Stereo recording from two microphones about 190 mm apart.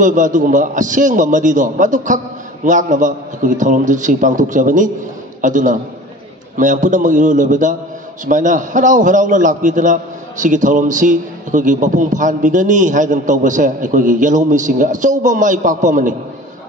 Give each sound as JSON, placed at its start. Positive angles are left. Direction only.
{"t": 0.0, "sound": "a man's voice", "side_deg": -40}